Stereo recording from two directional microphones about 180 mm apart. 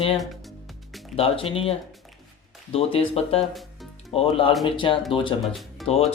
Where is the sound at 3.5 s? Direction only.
Centre (ahead or behind).